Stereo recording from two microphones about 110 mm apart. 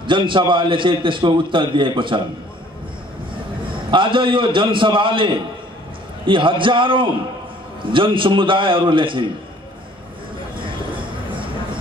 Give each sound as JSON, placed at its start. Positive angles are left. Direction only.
{"t": 0.3, "sound": "a man's voice", "side_deg": -45}
{"t": 3.9, "sound": "a man's voice", "side_deg": -50}